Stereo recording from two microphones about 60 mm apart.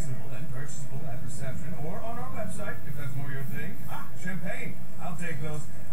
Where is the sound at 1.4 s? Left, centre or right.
Centre.